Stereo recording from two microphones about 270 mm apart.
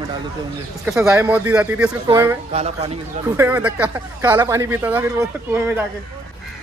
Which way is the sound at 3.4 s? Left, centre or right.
Centre.